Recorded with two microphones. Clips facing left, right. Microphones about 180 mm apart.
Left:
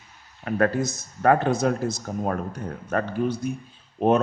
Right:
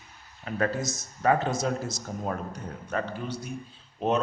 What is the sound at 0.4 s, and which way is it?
A man's voice, 60° left (ahead or behind).